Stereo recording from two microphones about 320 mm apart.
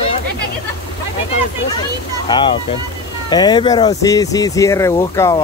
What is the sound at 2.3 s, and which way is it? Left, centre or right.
Speech, centre.